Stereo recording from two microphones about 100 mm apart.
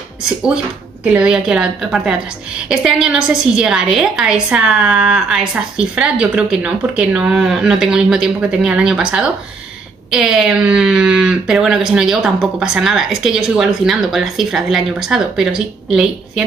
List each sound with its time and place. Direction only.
1.0 s a woman's voice: 10° right (ahead or behind)